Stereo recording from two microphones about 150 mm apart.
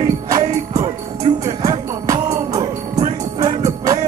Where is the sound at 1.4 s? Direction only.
25° right (ahead or behind).